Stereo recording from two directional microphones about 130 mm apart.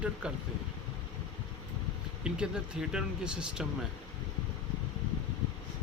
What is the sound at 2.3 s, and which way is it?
Speech, 5° right (ahead or behind).